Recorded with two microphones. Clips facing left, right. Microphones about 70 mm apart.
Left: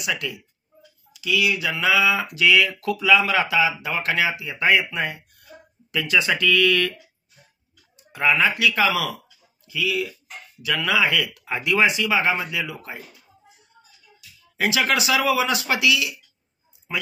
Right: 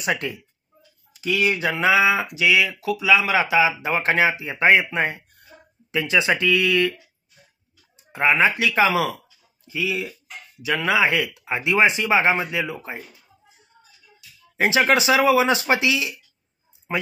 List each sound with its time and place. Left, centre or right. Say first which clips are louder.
0.0 s speech: right 3 dB; right; by 6.9 s centre
8.1 s speech: right 2 dB; right
14.6 s speech: right 3 dB; right